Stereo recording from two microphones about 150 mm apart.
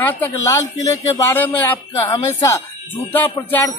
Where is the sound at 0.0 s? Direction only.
10° left (ahead or behind).